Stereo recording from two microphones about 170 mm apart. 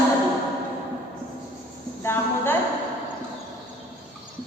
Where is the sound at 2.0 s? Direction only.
15° left (ahead or behind).